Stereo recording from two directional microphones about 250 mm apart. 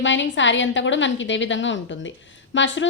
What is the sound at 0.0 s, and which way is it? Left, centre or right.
A woman's voice, left.